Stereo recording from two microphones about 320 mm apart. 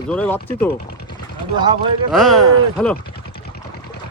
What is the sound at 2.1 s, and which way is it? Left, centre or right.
Speech, centre.